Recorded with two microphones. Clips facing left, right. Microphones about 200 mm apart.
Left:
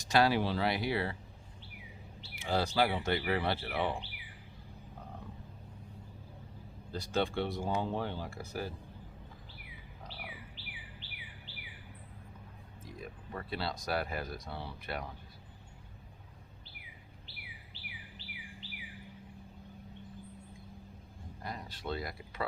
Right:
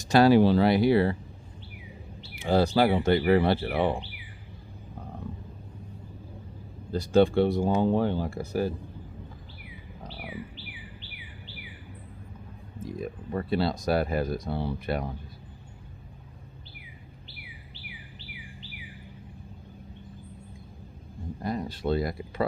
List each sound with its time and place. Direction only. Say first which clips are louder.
0.1 s speech: right 10 dB; 40° right (ahead or behind)
2.4 s speech: right 8 dB; 40° right (ahead or behind)
6.9 s speech: right 12 dB; 40° right (ahead or behind)
7.9 s speech: right 11 dB; 50° right (ahead or behind)
13.3 s speech: right 11 dB; 30° right (ahead or behind)
21.4 s speech: right 11 dB; 40° right (ahead or behind)